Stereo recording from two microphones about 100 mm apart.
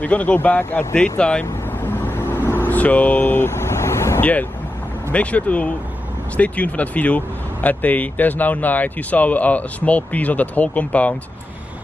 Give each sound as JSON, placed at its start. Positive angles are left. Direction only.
{"t": 0.0, "sound": "vehicle", "side_deg": 15}
{"t": 5.1, "sound": "speech", "side_deg": 15}